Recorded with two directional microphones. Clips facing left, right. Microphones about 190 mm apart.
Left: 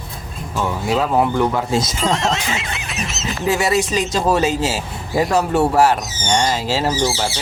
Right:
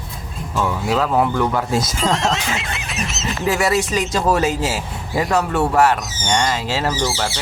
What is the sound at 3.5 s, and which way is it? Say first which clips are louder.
Speech: left 1 dB; 25° left (ahead or behind).